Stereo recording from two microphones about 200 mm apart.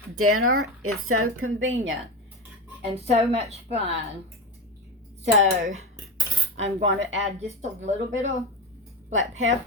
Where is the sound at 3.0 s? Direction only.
30° right (ahead or behind).